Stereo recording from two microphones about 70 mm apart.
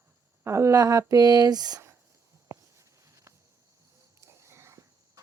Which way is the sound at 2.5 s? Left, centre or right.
Right.